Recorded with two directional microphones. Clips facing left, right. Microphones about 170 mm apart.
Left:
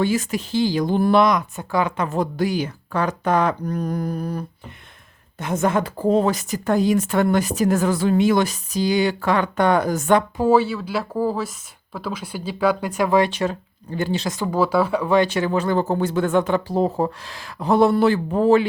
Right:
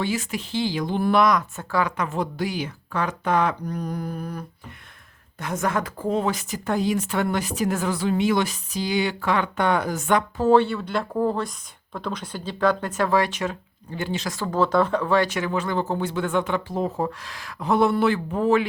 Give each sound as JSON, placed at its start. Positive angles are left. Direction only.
{"t": 0.0, "sound": "speech", "side_deg": 45}
{"t": 1.2, "sound": "speech", "side_deg": 20}
{"t": 2.0, "sound": "a woman's voice", "side_deg": 40}
{"t": 10.3, "sound": "speech", "side_deg": 10}
{"t": 13.3, "sound": "speech", "side_deg": 35}
{"t": 14.3, "sound": "speech", "side_deg": 15}
{"t": 15.3, "sound": "a woman's voice", "side_deg": 35}